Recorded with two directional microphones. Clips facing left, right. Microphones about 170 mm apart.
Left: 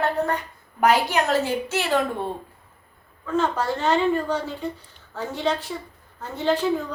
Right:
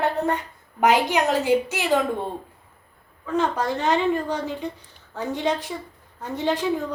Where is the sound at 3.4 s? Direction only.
15° right (ahead or behind).